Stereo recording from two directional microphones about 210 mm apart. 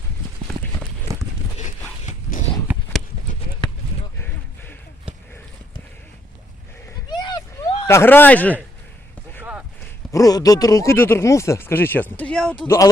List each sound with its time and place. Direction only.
7.1 s vehicle: 20° left (ahead or behind)
7.9 s speech: 10° left (ahead or behind)
9.4 s clip-clop: 5° right (ahead or behind)
10.1 s speech: 15° left (ahead or behind)